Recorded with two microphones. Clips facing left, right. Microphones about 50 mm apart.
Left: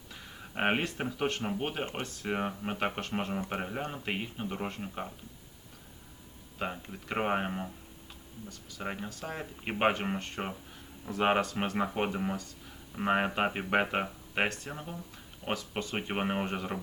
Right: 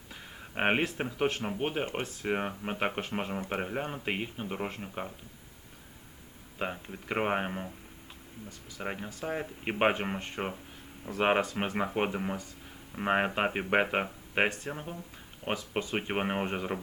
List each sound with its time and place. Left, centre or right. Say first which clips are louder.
0.1 s a sound: right 1 dB; centre
0.9 s speech: right 2 dB; centre
6.6 s speech: right 1 dB; centre